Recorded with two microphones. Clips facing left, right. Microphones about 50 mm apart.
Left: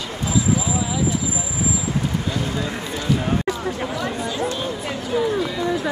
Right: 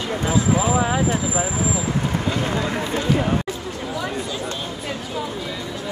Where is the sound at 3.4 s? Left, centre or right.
Left.